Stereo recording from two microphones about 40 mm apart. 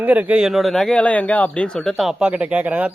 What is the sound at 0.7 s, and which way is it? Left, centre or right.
Speech, centre.